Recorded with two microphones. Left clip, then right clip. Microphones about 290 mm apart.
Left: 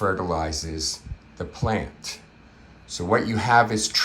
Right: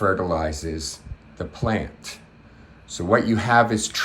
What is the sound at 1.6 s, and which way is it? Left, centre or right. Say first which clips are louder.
Speech: right 1 dB; centre.